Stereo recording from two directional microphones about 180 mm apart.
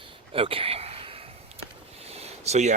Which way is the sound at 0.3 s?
30° right (ahead or behind).